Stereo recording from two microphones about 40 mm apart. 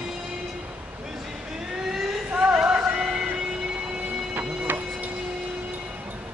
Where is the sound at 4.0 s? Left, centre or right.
Right.